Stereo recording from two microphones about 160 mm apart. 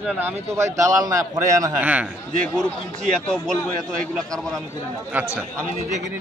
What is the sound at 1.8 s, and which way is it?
Speech, 10° right (ahead or behind).